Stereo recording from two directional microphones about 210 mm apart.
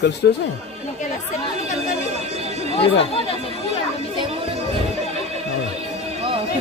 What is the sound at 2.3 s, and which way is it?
Neigh, 30° right (ahead or behind).